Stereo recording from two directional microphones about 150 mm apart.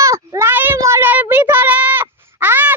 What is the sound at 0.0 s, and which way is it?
Child singing, 20° right (ahead or behind).